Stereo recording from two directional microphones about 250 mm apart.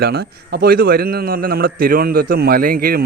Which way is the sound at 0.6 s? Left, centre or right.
Right.